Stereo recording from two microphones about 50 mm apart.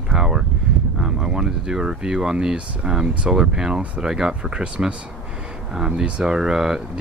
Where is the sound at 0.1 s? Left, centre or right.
Centre.